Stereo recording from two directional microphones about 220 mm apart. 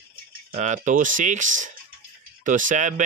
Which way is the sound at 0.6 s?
35° right (ahead or behind).